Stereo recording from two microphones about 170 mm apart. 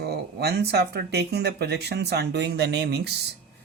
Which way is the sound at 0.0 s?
75° right (ahead or behind).